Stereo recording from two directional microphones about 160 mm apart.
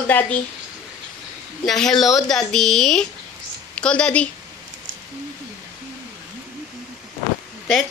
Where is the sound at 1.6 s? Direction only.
Centre (ahead or behind).